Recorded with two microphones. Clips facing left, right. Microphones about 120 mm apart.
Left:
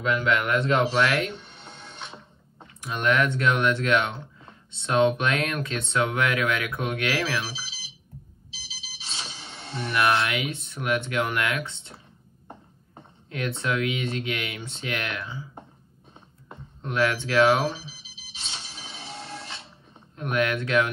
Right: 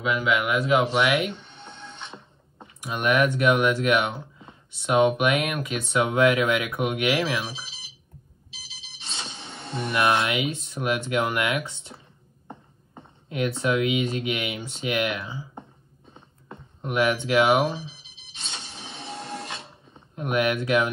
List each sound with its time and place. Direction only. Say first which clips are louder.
0.0 s speech: even; 5° right (ahead or behind)
2.6 s speech: even; 15° right (ahead or behind)
9.8 s speech: right 1 dB; 20° right (ahead or behind)
13.3 s speech: right 4 dB; 20° right (ahead or behind)
16.8 s speech: right 2 dB; 20° right (ahead or behind)
19.1 s printer: right 4 dB; 55° right (ahead or behind)
20.2 s speech: right 2 dB; 20° right (ahead or behind)